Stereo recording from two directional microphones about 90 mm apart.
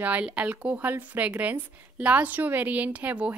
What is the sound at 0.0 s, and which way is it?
A woman's voice, 15° right (ahead or behind).